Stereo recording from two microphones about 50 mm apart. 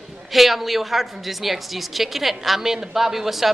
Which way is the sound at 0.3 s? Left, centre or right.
Centre.